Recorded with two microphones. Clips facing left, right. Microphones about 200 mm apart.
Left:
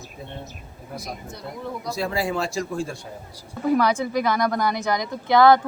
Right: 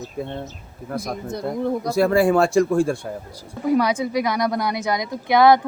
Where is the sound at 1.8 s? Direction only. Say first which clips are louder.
Right 9 dB; 55° right (ahead or behind).